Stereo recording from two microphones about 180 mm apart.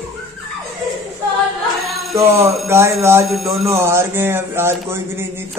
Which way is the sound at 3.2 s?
Centre (ahead or behind).